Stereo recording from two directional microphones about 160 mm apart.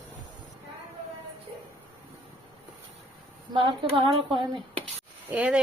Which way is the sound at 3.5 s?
30° right (ahead or behind).